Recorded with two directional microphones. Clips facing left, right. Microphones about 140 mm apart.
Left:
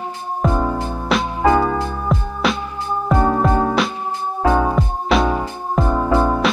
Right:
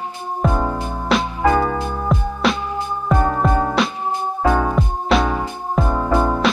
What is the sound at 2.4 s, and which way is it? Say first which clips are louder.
Music: right 1 dB; centre (ahead or behind).